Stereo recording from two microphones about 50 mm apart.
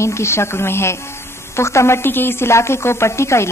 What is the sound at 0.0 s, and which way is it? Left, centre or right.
A woman's voice, left.